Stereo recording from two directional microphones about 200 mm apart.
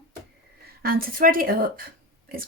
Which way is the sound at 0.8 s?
45° right (ahead or behind).